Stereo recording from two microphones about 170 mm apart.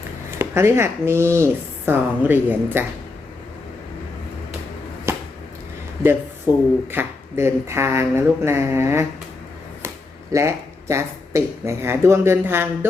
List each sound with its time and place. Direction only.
0.3 s speech: 15° right (ahead or behind)
5.1 s a sound: 15° right (ahead or behind)
6.5 s speech: 15° right (ahead or behind)
10.3 s speech: 15° right (ahead or behind)